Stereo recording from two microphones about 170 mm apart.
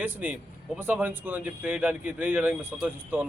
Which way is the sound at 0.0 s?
10° right (ahead or behind).